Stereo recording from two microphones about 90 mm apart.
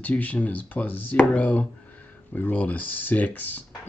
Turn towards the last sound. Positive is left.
turn(degrees=20)  # may be behind; listen again after turning